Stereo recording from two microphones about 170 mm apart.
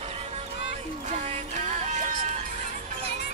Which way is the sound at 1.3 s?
40° right (ahead or behind).